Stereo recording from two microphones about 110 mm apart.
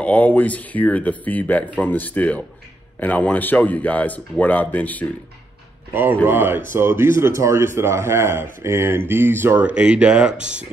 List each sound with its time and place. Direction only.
0.0 s speech: 15° left (ahead or behind)
6.2 s a man's voice: 20° right (ahead or behind)